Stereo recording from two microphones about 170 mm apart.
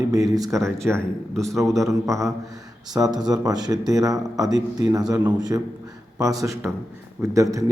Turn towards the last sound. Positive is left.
turn(degrees=-20)  # may be behind; listen again after turning